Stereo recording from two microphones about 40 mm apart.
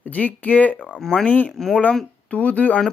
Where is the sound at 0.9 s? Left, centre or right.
Centre.